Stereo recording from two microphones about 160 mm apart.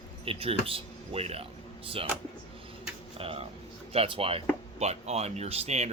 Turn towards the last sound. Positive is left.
turn(degrees=-40)  # may be behind; listen again after turning